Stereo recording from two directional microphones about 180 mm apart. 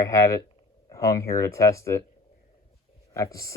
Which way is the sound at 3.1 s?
15° left (ahead or behind).